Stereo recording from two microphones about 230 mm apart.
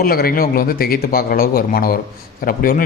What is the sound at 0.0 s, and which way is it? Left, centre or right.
A man's voice, left.